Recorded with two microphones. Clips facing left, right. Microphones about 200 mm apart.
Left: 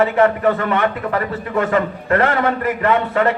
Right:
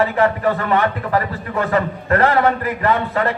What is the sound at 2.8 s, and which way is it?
Speech, 35° right (ahead or behind).